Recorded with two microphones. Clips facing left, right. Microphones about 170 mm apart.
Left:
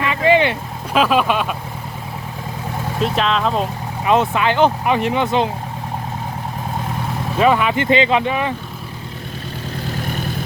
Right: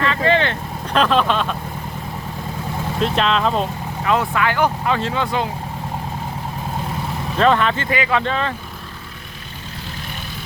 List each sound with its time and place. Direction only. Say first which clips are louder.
0.0 s vehicle: left 3 dB; 15° left (ahead or behind)
0.9 s speech: left 1 dB; 10° left (ahead or behind)
3.0 s speech: even; centre (ahead or behind)
4.0 s speech: left 3 dB; 20° left (ahead or behind)
7.3 s speech: left 1 dB; 10° left (ahead or behind)
7.9 s speech: left 5 dB; 25° left (ahead or behind)
8.2 s speech: left 2 dB; 15° left (ahead or behind)